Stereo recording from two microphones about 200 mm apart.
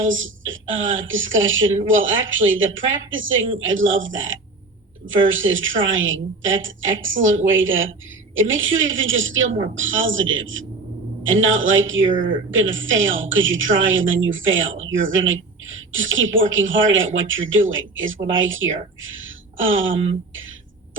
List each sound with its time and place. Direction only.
0.0 s a woman's voice: 75° right (ahead or behind)